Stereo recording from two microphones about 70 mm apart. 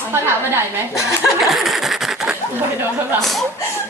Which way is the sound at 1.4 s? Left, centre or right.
Centre.